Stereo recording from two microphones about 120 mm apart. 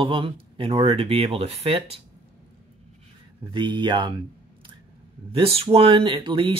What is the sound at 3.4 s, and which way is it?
Speech, 40° right (ahead or behind).